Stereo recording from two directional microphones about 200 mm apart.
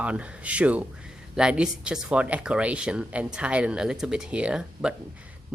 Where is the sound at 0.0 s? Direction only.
5° right (ahead or behind).